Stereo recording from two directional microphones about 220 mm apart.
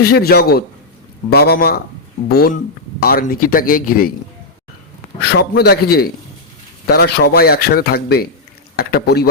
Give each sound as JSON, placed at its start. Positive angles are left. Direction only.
{"t": 0.0, "sound": "a man's voice", "side_deg": 45}
{"t": 5.4, "sound": "a man's voice", "side_deg": 45}